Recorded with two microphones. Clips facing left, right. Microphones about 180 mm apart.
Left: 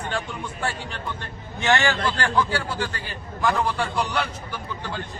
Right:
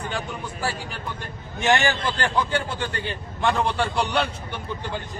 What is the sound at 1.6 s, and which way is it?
A man's voice, 15° right (ahead or behind).